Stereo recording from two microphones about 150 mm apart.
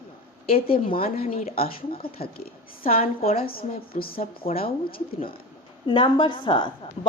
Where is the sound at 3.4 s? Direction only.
80° left.